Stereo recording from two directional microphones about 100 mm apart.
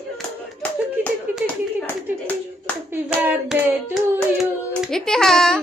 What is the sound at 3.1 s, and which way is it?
Hands, 20° right (ahead or behind).